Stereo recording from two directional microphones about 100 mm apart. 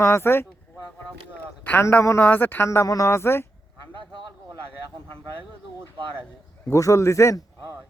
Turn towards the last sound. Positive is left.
turn(degrees=30)  # may be behind; listen again after turning